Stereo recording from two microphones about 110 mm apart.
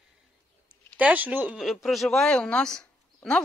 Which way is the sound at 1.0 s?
15° right (ahead or behind).